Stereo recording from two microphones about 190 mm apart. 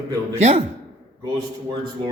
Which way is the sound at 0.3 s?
35° right (ahead or behind).